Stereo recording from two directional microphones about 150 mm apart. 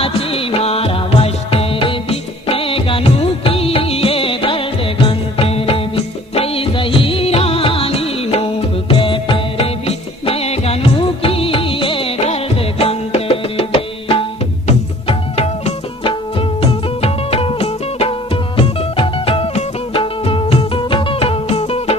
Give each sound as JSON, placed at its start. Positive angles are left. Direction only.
{"t": 0.0, "sound": "music", "side_deg": 40}